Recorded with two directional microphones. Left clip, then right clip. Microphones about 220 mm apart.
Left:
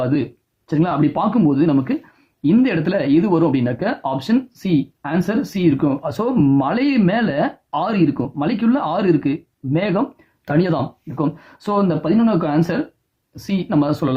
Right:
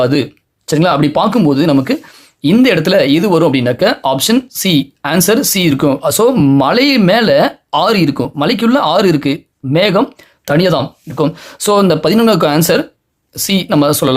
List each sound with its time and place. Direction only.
0.0 s speech: 35° right (ahead or behind)